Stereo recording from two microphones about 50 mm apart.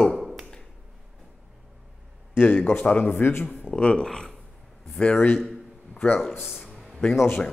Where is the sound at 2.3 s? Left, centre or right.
Left.